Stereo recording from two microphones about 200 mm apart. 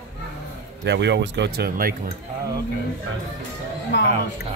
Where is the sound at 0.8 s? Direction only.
60° right (ahead or behind).